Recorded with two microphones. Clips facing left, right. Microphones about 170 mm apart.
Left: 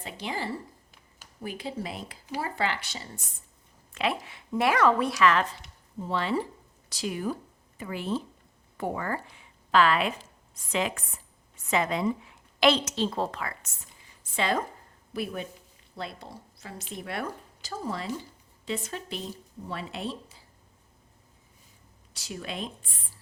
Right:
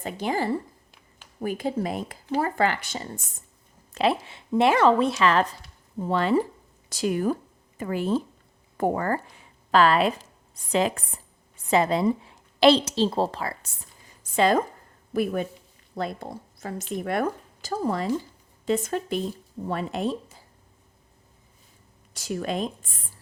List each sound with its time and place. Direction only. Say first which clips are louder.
0.0 s speech: right 7 dB; 45° right (ahead or behind)
3.9 s speech: right 6 dB; 30° right (ahead or behind)
6.0 s speech: right 6 dB; 50° right (ahead or behind); by 13.7 s 35° right (ahead or behind)
14.3 s speech: right 7 dB; 45° right (ahead or behind)
22.1 s speech: right 9 dB; 50° right (ahead or behind)